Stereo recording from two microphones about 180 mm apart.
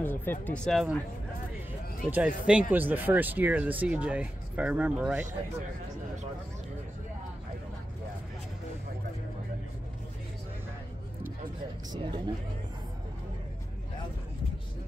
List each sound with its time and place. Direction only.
0.0 s speech: 10° left (ahead or behind)
2.0 s speech: 10° right (ahead or behind)
11.9 s speech: 25° right (ahead or behind)